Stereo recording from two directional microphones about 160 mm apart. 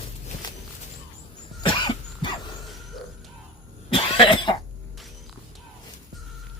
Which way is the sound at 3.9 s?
30° left (ahead or behind).